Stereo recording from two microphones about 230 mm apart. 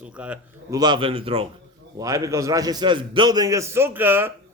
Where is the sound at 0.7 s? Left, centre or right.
Centre.